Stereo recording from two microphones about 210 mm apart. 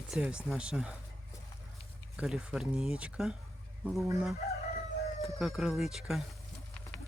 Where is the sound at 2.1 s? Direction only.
5° right (ahead or behind).